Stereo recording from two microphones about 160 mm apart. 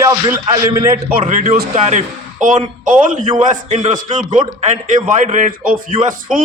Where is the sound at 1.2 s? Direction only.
40° right (ahead or behind); by 6.0 s 60° right (ahead or behind).